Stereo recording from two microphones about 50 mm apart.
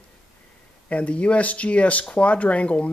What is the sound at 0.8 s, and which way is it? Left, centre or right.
Speech, left.